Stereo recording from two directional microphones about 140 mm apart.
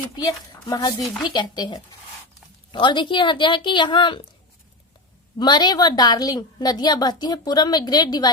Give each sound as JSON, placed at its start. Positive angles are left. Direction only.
{"t": 0.2, "sound": "speech", "side_deg": 30}
{"t": 5.4, "sound": "a woman's voice", "side_deg": 30}